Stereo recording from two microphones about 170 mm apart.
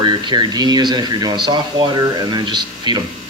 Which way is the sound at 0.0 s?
25° right (ahead or behind).